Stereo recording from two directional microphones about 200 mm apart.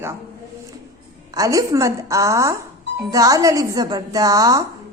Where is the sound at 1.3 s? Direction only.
15° right (ahead or behind).